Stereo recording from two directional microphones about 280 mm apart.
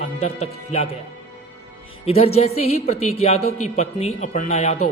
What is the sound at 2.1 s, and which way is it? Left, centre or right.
A man's voice, left.